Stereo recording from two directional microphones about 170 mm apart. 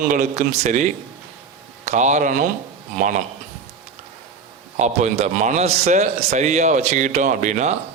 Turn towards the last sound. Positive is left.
turn(degrees=-45)  # may be behind; listen again after turning